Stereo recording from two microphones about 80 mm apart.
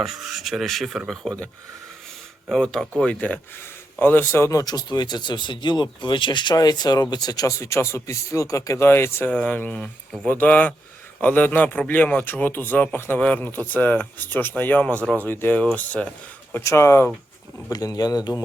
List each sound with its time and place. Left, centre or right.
0.0 s speech: centre
2.6 s a man's voice: centre; by 4.6 s left
4.6 s speech: left
9.3 s a man's voice: centre
16.6 s a man's voice: left
17.7 s a man's voice: left